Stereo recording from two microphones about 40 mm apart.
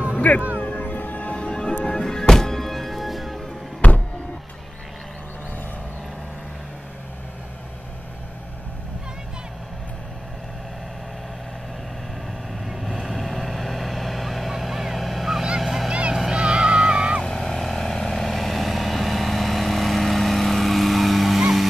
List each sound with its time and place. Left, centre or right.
0.1 s music: left
1.3 s music: left; by 3.3 s centre
3.8 s a sound: left
12.5 s vehicle: centre
15.6 s a sound: centre
15.9 s vehicle: right
16.3 s music: right
17.2 s vehicle: centre
21.4 s music: centre